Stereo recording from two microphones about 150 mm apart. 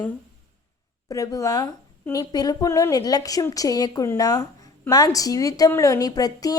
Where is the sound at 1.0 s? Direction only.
20° left (ahead or behind).